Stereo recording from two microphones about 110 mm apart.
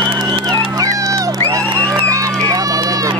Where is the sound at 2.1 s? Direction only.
30° right (ahead or behind).